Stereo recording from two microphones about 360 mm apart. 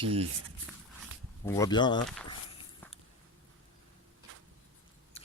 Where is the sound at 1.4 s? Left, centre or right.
Centre.